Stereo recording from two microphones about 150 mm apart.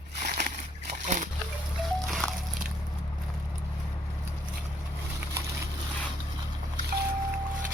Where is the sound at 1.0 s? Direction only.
55° right (ahead or behind).